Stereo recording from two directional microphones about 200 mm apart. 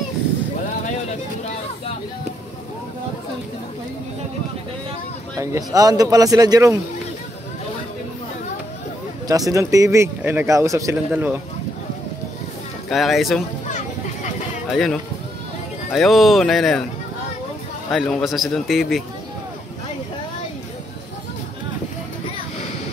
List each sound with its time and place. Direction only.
5.4 s a man's voice: 15° right (ahead or behind)
9.3 s a man's voice: 15° right (ahead or behind)
12.9 s a man's voice: centre (ahead or behind)
13.7 s children playing: 40° left (ahead or behind)
14.7 s a man's voice: 5° left (ahead or behind)
17.9 s a man's voice: centre (ahead or behind)